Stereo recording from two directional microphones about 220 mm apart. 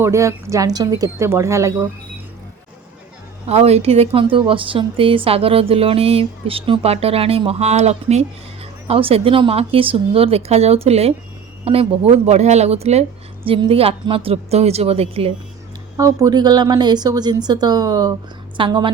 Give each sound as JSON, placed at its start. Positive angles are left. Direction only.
{"t": 0.0, "sound": "speech", "side_deg": -15}
{"t": 3.4, "sound": "a woman's voice", "side_deg": -30}
{"t": 16.0, "sound": "a woman's voice", "side_deg": -15}